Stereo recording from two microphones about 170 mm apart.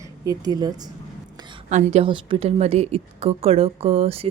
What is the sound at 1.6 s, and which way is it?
A woman's voice, 45° right (ahead or behind).